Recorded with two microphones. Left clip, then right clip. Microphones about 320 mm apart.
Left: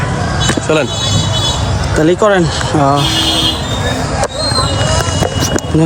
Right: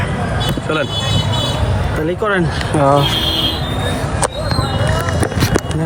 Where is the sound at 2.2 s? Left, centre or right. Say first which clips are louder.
Left 6 dB; centre.